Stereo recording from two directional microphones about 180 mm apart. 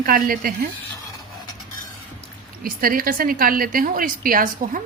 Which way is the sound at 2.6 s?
50° right (ahead or behind).